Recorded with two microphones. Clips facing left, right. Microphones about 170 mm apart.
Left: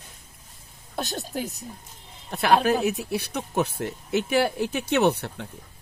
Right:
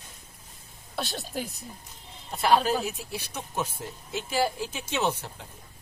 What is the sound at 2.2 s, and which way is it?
Speech, 65° left (ahead or behind).